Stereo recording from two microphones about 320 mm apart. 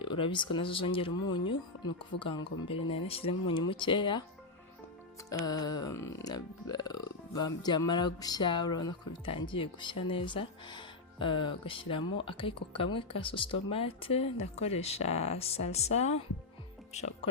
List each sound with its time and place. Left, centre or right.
0.0 s speech: centre
0.5 s music: centre
5.3 s music: centre
16.9 s speech: left